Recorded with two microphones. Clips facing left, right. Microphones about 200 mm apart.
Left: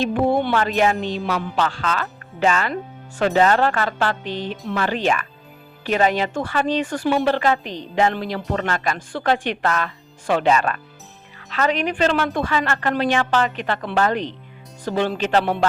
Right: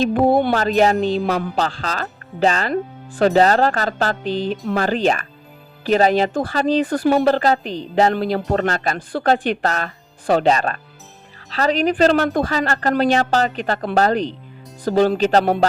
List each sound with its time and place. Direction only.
0.0 s a woman's voice: 40° right (ahead or behind)